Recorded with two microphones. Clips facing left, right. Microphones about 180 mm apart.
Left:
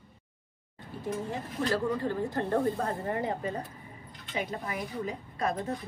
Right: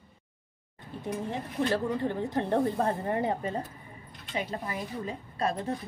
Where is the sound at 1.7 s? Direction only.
20° right (ahead or behind).